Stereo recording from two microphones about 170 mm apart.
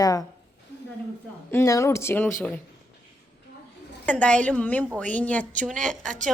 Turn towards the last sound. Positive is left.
turn(degrees=5)  # may be behind; listen again after turning